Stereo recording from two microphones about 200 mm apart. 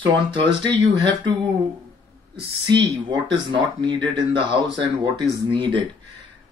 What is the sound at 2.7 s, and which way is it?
Speech, 25° right (ahead or behind).